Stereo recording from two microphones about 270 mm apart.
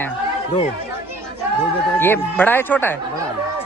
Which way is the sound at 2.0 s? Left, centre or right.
Centre.